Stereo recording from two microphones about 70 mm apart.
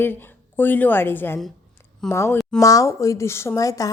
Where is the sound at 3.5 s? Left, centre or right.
Left.